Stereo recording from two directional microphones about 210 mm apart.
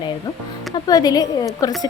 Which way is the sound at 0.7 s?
20° left (ahead or behind).